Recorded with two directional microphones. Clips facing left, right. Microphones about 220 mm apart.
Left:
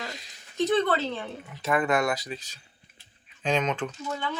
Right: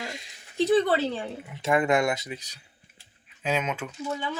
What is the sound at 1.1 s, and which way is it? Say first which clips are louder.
Speech: right 2 dB; 20° right (ahead or behind).